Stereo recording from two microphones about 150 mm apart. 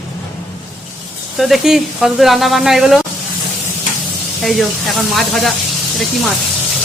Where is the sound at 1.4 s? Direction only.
Centre (ahead or behind).